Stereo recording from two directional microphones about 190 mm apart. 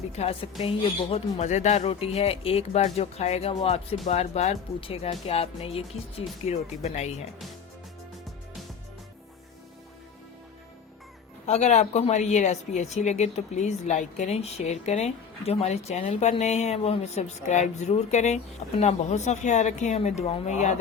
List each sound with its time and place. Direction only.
0.1 s speech: 30° left (ahead or behind)
11.4 s speech: 35° left (ahead or behind)